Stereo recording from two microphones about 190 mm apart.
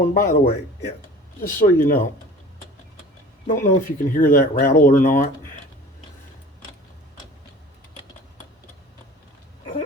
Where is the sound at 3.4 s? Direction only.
40° left (ahead or behind).